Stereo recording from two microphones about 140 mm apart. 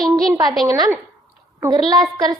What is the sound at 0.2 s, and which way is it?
A woman's voice, 30° right (ahead or behind).